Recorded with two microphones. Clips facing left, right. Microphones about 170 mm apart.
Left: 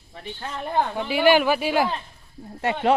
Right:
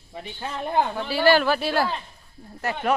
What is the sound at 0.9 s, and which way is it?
Speech, 15° left (ahead or behind).